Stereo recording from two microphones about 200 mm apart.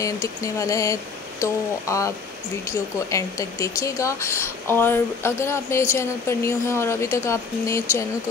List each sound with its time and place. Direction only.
0.0 s speech: 15° left (ahead or behind)